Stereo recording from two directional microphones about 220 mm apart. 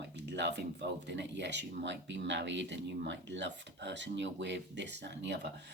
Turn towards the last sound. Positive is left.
turn(degrees=-50)  # may be behind; listen again after turning